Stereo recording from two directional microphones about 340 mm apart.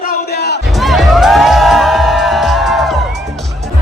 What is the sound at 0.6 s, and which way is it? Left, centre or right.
Music, centre.